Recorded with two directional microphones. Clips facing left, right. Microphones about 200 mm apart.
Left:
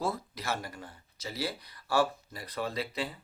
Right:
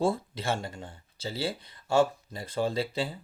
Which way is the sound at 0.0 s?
30° right (ahead or behind).